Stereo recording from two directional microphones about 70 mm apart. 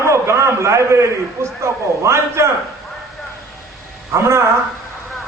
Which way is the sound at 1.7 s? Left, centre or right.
Right.